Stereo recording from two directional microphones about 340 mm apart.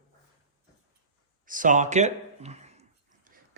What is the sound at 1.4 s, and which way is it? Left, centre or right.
Speech, right.